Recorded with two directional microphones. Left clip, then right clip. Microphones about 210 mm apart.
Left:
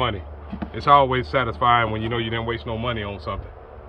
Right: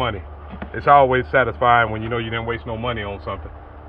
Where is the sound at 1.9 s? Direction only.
15° left (ahead or behind).